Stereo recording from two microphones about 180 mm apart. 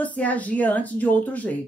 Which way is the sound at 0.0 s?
10° left (ahead or behind).